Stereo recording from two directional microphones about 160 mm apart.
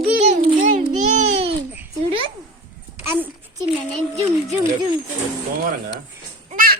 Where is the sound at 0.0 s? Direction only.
40° right (ahead or behind).